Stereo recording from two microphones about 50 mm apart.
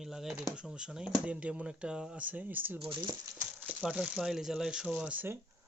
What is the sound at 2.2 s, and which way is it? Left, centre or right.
Speech, right.